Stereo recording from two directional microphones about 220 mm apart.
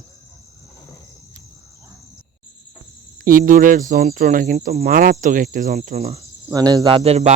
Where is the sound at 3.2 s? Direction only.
40° right (ahead or behind).